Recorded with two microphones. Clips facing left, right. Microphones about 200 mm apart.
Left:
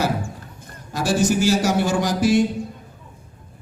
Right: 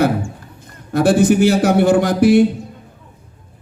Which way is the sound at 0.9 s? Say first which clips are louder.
Right 7 dB; 60° right (ahead or behind).